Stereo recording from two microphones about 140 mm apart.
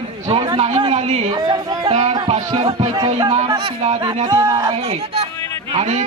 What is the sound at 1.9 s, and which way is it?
Speech, 55° right (ahead or behind).